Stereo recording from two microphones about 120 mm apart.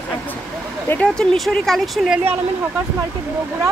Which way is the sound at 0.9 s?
5° left (ahead or behind).